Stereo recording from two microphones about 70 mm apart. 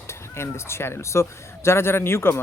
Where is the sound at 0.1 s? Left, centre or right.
Left.